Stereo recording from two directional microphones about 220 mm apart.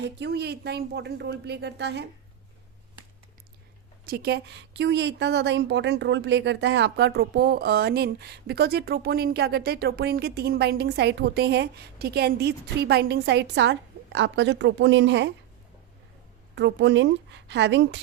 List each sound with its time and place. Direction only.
0.0 s speech: 50° right (ahead or behind)
4.0 s speech: 45° right (ahead or behind)
16.6 s speech: 55° right (ahead or behind)